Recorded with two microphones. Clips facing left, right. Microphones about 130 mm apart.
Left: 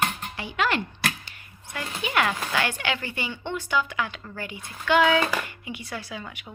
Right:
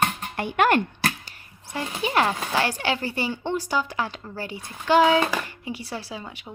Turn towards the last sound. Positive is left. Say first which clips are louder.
# right 1 dB
turn(degrees=-30)  # may be behind; listen again after turning